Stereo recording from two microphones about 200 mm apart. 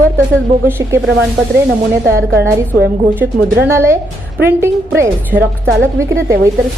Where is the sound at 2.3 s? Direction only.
50° right (ahead or behind).